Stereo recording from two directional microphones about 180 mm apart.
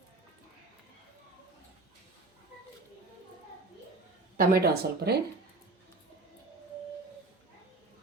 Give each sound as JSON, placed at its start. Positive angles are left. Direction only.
{"t": 4.4, "sound": "speech", "side_deg": -55}